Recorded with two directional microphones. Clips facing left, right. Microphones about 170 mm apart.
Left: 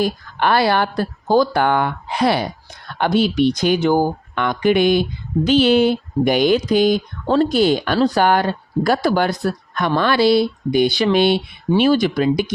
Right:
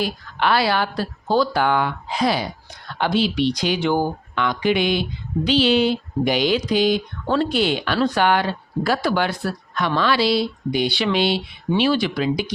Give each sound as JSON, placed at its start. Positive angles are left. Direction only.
{"t": 0.0, "sound": "speech", "side_deg": 45}
{"t": 7.3, "sound": "speech", "side_deg": 35}